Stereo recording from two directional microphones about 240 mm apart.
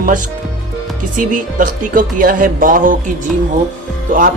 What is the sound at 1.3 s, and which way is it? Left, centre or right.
Speech, right.